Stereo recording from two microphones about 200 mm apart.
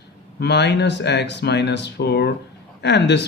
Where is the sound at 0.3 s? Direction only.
60° left (ahead or behind).